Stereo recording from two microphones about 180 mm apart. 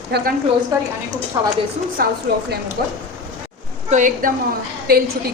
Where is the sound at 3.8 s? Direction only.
45° right (ahead or behind).